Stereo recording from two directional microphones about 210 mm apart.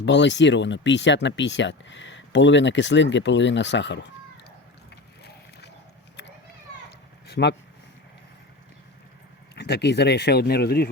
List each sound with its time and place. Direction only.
0.0 s speech: 55° left (ahead or behind)
5.2 s run: 50° left (ahead or behind)
7.3 s a sound: 55° left (ahead or behind)
9.6 s speech: 55° left (ahead or behind)